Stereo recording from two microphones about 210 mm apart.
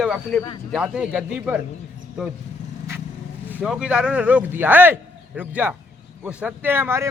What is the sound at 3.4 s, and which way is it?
Speech, 5° right (ahead or behind).